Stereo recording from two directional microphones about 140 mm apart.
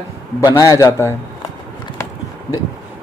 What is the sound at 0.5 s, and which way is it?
Speech, 25° left (ahead or behind).